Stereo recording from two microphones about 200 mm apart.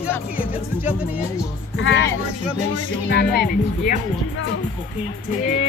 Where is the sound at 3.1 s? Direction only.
55° left (ahead or behind).